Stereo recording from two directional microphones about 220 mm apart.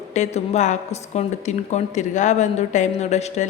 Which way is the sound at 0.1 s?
30° left (ahead or behind).